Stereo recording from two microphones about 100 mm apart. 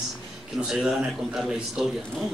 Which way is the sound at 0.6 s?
5° right (ahead or behind).